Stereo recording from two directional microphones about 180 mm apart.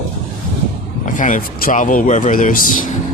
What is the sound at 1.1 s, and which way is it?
A man's voice, 45° left (ahead or behind).